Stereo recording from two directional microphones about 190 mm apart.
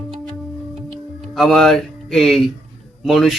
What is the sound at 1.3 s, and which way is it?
Speech, centre (ahead or behind).